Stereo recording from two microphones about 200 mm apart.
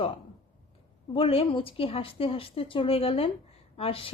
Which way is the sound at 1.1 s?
30° left (ahead or behind).